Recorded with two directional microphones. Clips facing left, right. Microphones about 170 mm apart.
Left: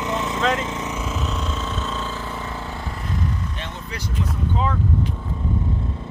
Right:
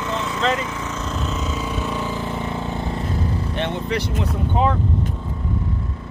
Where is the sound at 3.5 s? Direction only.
65° right (ahead or behind).